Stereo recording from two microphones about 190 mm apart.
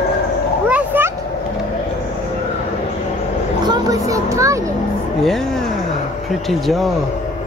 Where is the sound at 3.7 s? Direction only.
20° right (ahead or behind).